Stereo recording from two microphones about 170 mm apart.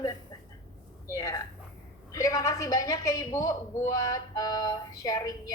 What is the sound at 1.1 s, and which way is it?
A man's voice, 20° left (ahead or behind).